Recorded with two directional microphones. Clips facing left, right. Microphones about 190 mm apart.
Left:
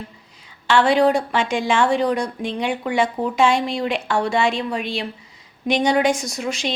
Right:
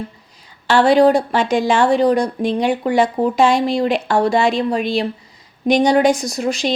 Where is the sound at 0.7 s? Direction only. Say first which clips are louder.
Right 4 dB; 40° right (ahead or behind).